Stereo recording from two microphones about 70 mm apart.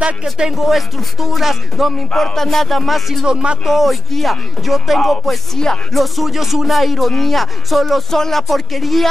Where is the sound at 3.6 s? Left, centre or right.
Centre.